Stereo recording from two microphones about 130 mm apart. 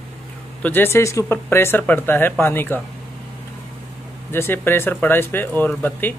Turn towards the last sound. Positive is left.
turn(degrees=15)  # may be behind; listen again after turning